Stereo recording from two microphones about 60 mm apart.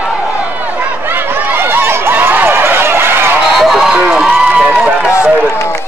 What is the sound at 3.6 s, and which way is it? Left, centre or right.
Run, centre.